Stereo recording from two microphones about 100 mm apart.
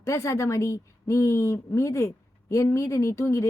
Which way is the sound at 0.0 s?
30° left (ahead or behind).